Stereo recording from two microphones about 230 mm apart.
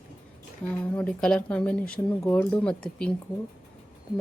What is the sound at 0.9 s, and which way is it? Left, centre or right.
Speech, centre.